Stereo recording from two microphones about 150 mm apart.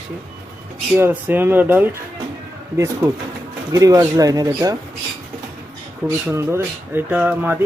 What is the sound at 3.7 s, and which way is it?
Speech, 20° right (ahead or behind).